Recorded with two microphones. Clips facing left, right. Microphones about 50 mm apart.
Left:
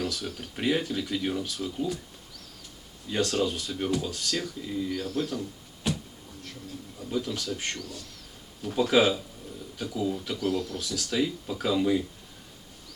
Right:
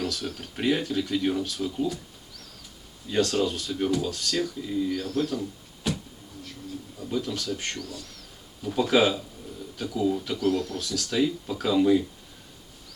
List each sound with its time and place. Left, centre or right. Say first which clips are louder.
0.1 s speech: right 2 dB; centre
3.3 s speech: right 2 dB; centre
3.9 s speech: right 2 dB; centre
4.3 s speech: right 4 dB; centre
7.0 s speech: right 1 dB; centre
10.8 s speech: right 2 dB; centre
11.1 s speech: right 3 dB; centre